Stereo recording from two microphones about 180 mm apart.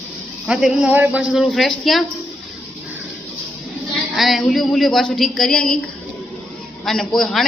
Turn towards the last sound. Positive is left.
turn(degrees=0)  # may be behind; listen again after turning